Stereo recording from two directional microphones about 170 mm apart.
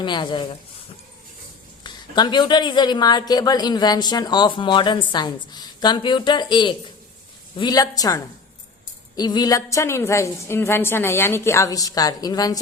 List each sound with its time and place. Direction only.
0.0 s speech: 25° left (ahead or behind)
1.8 s a woman's voice: 25° left (ahead or behind)